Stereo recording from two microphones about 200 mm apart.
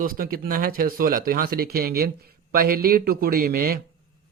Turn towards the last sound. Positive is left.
turn(degrees=-50)  # may be behind; listen again after turning